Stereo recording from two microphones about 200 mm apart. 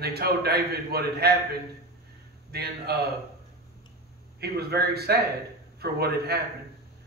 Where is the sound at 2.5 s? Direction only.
50° right (ahead or behind).